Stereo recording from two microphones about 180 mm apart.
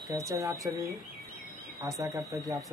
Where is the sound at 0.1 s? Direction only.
15° right (ahead or behind).